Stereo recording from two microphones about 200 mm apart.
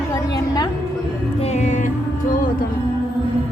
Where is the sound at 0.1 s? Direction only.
20° left (ahead or behind).